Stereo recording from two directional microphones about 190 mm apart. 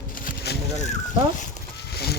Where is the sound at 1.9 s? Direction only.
55° left (ahead or behind).